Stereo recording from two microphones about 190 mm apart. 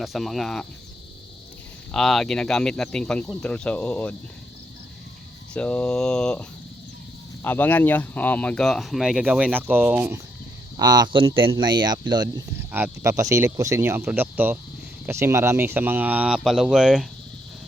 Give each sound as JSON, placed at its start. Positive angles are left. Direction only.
{"t": 0.0, "sound": "speech", "side_deg": 0}
{"t": 1.9, "sound": "speech", "side_deg": 0}
{"t": 5.5, "sound": "speech", "side_deg": 5}
{"t": 7.4, "sound": "speech", "side_deg": 10}
{"t": 10.8, "sound": "speech", "side_deg": -20}